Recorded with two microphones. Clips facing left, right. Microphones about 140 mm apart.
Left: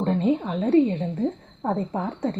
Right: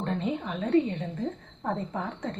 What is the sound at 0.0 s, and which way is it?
A woman's voice, 35° left (ahead or behind).